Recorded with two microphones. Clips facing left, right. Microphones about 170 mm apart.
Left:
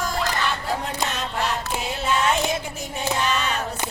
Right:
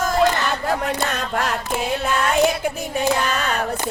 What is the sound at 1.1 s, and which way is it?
Music, 50° right (ahead or behind).